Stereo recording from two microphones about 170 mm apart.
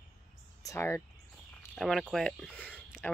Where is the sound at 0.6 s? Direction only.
15° left (ahead or behind).